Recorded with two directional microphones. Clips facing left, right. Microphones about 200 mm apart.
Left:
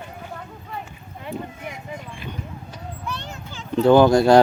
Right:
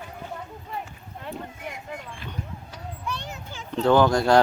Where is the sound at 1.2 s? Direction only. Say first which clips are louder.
Left 4 dB; 5° left (ahead or behind).